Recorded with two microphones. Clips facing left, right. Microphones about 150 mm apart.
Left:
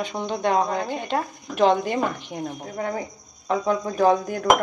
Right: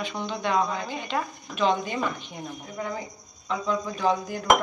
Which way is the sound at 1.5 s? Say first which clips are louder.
Left 5 dB; 65° left (ahead or behind).